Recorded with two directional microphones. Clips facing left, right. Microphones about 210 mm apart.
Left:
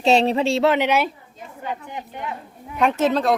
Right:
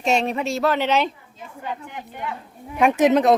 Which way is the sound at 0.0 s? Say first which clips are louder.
Left 4 dB; 30° left (ahead or behind).